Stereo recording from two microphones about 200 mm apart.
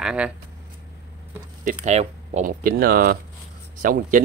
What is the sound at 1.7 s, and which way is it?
Speech, 35° right (ahead or behind).